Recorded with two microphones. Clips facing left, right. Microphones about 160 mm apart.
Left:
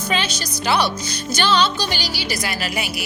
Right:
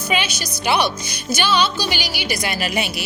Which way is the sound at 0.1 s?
10° right (ahead or behind).